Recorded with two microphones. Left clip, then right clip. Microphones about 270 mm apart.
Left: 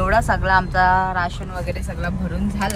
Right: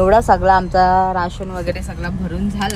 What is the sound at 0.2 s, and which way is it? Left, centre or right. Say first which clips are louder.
Speech: right 5 dB; centre.